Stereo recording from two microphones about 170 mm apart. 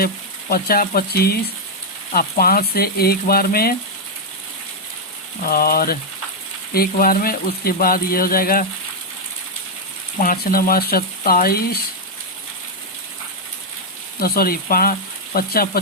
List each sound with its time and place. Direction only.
0.5 s speech: 60° left (ahead or behind)
2.4 s speech: 60° left (ahead or behind)
5.4 s speech: 60° left (ahead or behind)
10.2 s speech: 60° left (ahead or behind)
14.2 s speech: 60° left (ahead or behind)